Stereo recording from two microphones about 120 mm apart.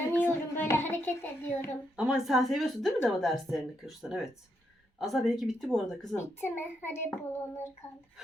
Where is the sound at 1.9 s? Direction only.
5° right (ahead or behind).